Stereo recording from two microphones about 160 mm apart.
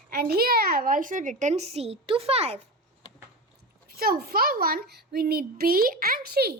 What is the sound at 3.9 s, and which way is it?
A child's voice, 70° right (ahead or behind).